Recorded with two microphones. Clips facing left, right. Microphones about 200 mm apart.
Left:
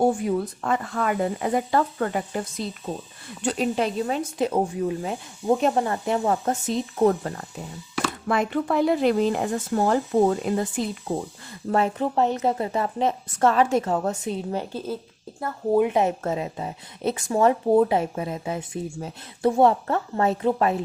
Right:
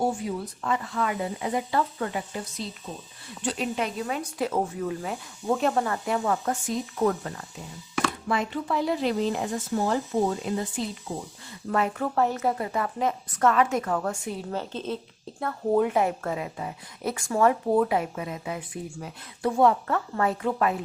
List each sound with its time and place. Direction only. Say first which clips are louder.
0.0 s speech: left 6 dB; 55° left (ahead or behind)
3.8 s speech: left 5 dB; 35° left (ahead or behind)
8.3 s speech: left 8 dB; 55° left (ahead or behind)
11.7 s speech: left 3 dB; 25° left (ahead or behind); by 15.8 s 5° left (ahead or behind)
15.8 s speech: left 3 dB; 20° left (ahead or behind)